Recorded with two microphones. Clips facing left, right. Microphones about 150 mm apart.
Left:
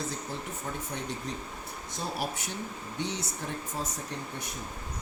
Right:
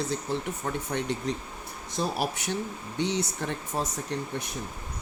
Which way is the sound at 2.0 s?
90° right.